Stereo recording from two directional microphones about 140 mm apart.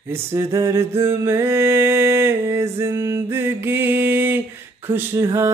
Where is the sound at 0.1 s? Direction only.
20° right (ahead or behind).